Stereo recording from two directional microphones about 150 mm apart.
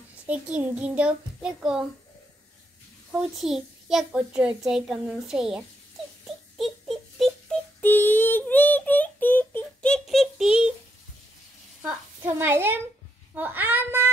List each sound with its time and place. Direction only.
0.3 s a child's voice: 10° right (ahead or behind)
3.1 s a child's voice: 5° right (ahead or behind)
6.2 s a sound: centre (ahead or behind)
7.8 s child singing: 15° left (ahead or behind); by 10.7 s 5° right (ahead or behind)
12.2 s a child's voice: 15° right (ahead or behind)